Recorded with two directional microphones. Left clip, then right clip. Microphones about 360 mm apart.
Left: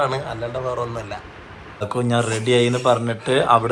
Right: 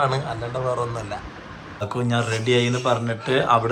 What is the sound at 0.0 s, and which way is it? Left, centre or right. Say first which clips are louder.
A man's voice: left 1 dB; centre.